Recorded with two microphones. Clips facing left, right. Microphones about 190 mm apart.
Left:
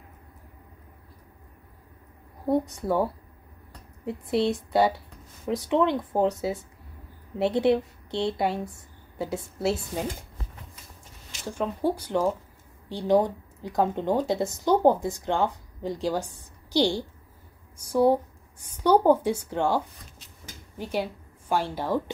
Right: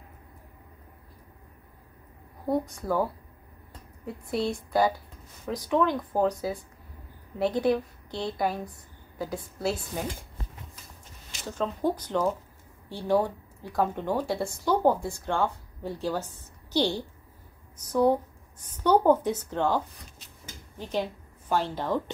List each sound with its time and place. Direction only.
2.5 s speech: 25° left (ahead or behind)
4.5 s a woman's voice: 25° left (ahead or behind)
11.4 s a woman's voice: 10° left (ahead or behind)